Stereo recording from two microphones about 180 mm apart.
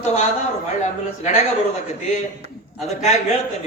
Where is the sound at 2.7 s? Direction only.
35° left (ahead or behind).